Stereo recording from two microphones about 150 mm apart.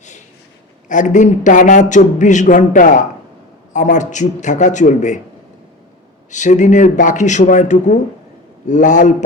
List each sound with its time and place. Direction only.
0.9 s speech: 55° left (ahead or behind)
6.3 s speech: 55° left (ahead or behind)